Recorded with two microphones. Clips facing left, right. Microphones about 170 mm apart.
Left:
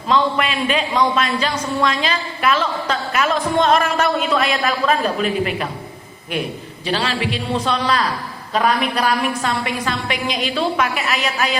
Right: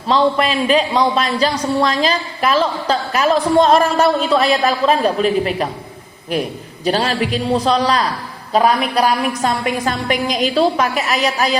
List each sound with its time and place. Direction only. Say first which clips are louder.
0.1 s a man's voice: right 3 dB; 35° right (ahead or behind)